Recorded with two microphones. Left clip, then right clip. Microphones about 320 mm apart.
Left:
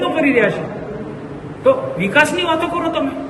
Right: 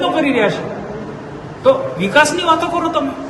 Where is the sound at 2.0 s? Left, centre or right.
Centre.